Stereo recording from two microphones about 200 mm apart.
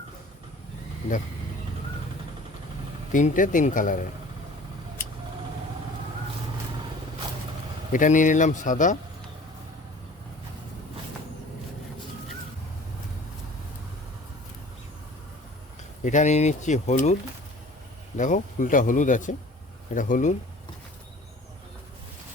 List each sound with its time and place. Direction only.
3.1 s speech: 40° left (ahead or behind)
7.9 s speech: 40° left (ahead or behind)
16.0 s speech: 35° left (ahead or behind)
18.2 s speech: 40° left (ahead or behind)